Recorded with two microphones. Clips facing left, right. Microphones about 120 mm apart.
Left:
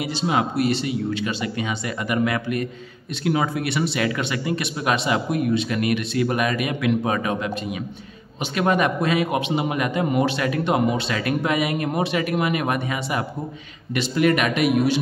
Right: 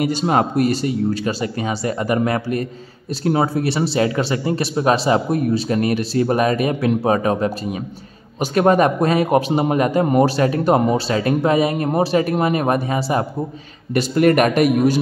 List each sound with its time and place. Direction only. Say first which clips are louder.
0.0 s a man's voice: right 5 dB; 45° right (ahead or behind)
13.9 s a man's voice: right 5 dB; 45° right (ahead or behind)